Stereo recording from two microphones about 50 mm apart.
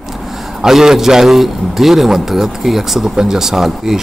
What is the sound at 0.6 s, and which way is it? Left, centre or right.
A man's voice, centre.